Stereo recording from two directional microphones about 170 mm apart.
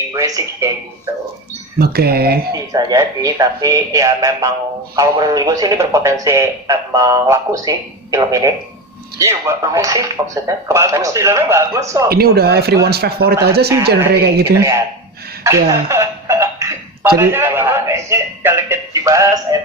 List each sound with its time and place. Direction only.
0.1 s speech: 20° right (ahead or behind)
1.8 s speech: 65° right (ahead or behind)
2.5 s speech: 20° right (ahead or behind)
12.0 s speech: 65° right (ahead or behind)
14.5 s speech: 15° right (ahead or behind)